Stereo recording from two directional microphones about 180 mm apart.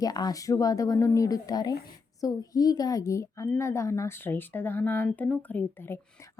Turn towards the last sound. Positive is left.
turn(degrees=15)  # may be behind; listen again after turning